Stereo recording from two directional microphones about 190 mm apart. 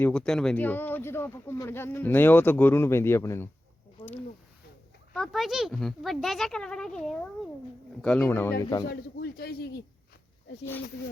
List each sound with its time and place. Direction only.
0.0 s speech: 5° left (ahead or behind)
5.1 s speech: centre (ahead or behind)
8.9 s speech: 55° left (ahead or behind)